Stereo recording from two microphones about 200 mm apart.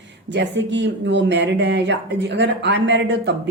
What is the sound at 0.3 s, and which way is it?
Speech, 65° right (ahead or behind).